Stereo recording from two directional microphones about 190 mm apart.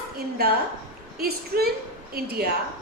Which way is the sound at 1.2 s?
55° right (ahead or behind).